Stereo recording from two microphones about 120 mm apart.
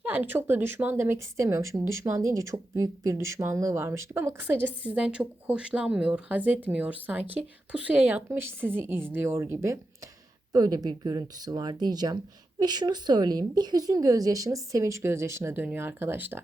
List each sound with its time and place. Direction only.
0.0 s a woman's voice: 15° right (ahead or behind)